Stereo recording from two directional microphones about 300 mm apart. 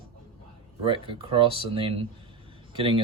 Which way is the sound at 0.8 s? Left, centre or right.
Centre.